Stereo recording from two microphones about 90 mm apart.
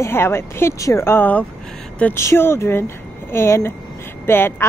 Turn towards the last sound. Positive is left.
turn(degrees=25)  # may be behind; listen again after turning